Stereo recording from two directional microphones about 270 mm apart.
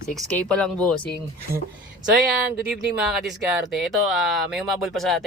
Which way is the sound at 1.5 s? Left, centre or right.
Right.